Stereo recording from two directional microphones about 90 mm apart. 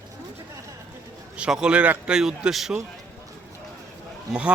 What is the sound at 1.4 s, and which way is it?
Speech, 10° right (ahead or behind).